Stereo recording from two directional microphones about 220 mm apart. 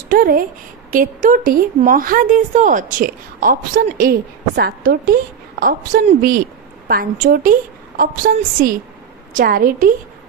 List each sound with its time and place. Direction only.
0.1 s a woman's voice: 40° right (ahead or behind)